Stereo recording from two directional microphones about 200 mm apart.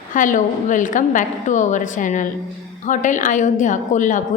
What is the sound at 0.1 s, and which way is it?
A woman's voice, 40° left (ahead or behind).